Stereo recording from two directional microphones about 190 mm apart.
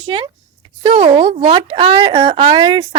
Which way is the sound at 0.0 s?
25° right (ahead or behind).